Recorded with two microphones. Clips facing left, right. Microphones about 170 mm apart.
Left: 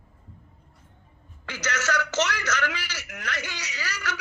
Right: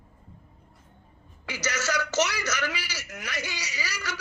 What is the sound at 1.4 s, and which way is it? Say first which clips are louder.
A man's voice: left 1 dB; 10° right (ahead or behind).